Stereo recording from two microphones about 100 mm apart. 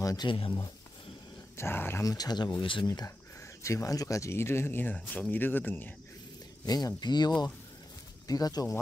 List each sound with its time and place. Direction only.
0.0 s speech: 40° left (ahead or behind)
1.6 s speech: 25° left (ahead or behind)
2.0 s speech: 40° left (ahead or behind)
3.6 s speech: 30° left (ahead or behind)
6.6 s speech: 40° left (ahead or behind)